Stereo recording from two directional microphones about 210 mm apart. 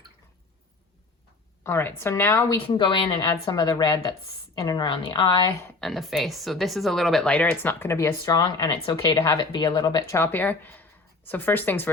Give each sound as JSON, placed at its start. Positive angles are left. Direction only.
{"t": 1.6, "sound": "speech", "side_deg": 10}
{"t": 2.6, "sound": "a woman's voice", "side_deg": 25}
{"t": 5.8, "sound": "speech", "side_deg": 0}